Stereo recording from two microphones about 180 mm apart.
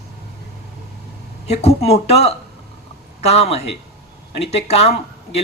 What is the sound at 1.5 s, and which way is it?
A man's voice, 35° left (ahead or behind).